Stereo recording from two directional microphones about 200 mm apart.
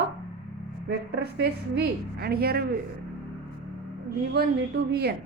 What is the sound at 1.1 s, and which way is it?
A woman's voice, 55° right (ahead or behind).